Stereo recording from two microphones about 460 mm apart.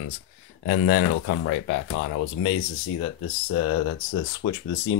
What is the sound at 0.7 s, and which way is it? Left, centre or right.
Speech, left.